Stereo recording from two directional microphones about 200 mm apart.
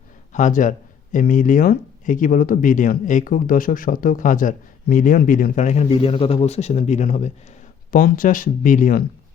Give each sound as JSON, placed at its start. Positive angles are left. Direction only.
{"t": 0.3, "sound": "speech", "side_deg": 40}